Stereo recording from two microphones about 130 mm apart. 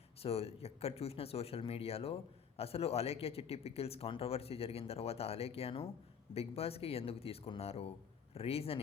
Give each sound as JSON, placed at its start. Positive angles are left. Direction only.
{"t": 0.2, "sound": "a man's voice", "side_deg": 50}